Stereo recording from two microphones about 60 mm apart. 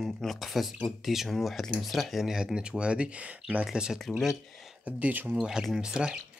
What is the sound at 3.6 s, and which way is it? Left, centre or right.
Speech, centre.